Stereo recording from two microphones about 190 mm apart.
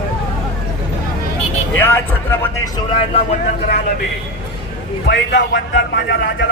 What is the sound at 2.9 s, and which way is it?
Speech, 25° left (ahead or behind).